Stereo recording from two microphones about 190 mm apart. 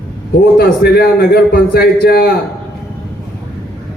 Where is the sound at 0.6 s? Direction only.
55° left (ahead or behind).